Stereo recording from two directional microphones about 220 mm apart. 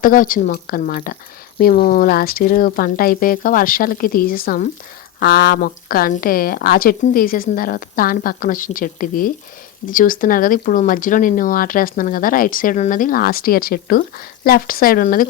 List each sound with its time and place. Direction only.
0.0 s speech: 40° left (ahead or behind)